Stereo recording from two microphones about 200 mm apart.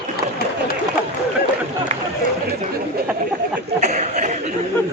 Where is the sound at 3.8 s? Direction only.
35° right (ahead or behind).